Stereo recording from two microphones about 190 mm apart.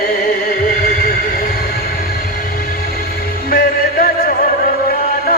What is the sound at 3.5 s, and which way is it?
Music, 50° left (ahead or behind).